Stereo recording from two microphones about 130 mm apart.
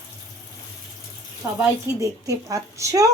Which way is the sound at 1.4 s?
20° right (ahead or behind).